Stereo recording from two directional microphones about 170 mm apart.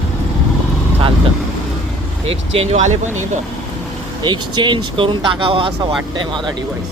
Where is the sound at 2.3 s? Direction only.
35° right (ahead or behind).